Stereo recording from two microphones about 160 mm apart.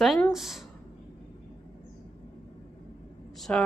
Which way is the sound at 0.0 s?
Centre (ahead or behind).